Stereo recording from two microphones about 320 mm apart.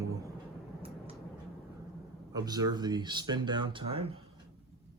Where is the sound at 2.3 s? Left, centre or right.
Centre.